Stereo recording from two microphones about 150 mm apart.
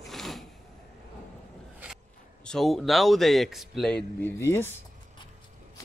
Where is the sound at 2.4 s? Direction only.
Centre (ahead or behind).